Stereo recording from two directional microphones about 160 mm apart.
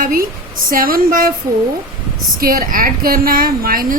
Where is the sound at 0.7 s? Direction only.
65° right (ahead or behind).